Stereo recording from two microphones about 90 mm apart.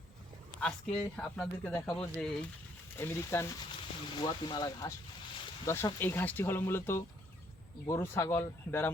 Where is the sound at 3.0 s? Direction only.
30° left (ahead or behind).